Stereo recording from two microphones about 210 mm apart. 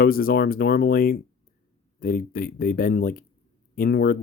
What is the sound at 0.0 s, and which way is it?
Speech, 45° left (ahead or behind).